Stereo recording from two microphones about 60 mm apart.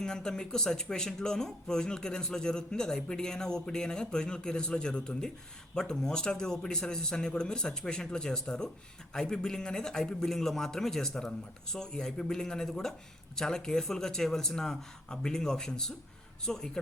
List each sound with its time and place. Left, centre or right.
0.0 s speech: centre